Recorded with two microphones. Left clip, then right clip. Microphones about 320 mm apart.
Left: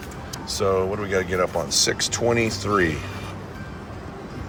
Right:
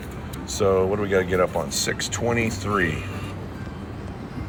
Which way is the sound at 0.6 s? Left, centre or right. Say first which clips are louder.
Right 2 dB; centre.